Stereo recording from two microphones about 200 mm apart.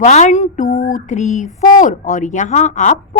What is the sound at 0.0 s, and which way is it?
A woman's voice, 35° left (ahead or behind).